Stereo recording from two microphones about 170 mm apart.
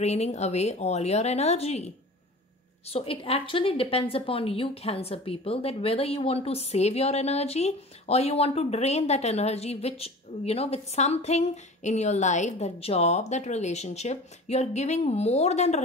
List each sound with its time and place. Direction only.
0.0 s a woman's voice: 40° left (ahead or behind)
2.9 s a woman's voice: 35° left (ahead or behind)